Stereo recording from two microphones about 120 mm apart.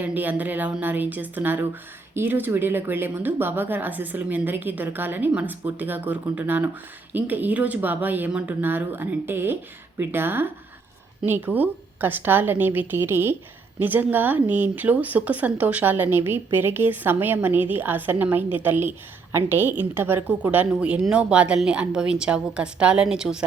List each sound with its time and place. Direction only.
0.0 s speech: 15° right (ahead or behind)